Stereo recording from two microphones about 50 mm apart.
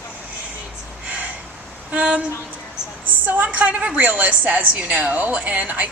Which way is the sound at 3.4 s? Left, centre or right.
Right.